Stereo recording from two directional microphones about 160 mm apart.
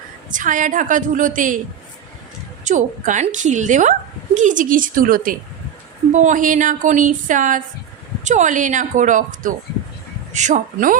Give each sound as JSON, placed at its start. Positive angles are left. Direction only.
{"t": 0.3, "sound": "a woman's voice", "side_deg": -55}
{"t": 2.6, "sound": "a woman's voice", "side_deg": -50}
{"t": 6.1, "sound": "a woman's voice", "side_deg": -50}